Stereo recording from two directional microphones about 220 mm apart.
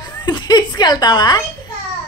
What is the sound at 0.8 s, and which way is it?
Speech, 20° left (ahead or behind).